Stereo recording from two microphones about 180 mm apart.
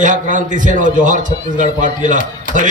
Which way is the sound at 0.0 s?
45° right (ahead or behind).